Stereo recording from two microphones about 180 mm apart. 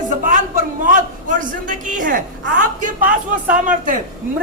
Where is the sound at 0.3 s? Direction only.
45° right (ahead or behind).